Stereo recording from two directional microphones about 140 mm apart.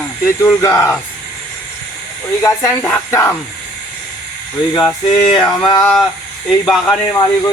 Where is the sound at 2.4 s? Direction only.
20° left (ahead or behind).